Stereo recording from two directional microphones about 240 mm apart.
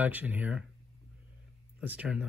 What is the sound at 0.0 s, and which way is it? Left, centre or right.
Speech, centre.